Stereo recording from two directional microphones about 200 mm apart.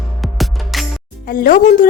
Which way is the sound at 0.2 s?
Centre (ahead or behind).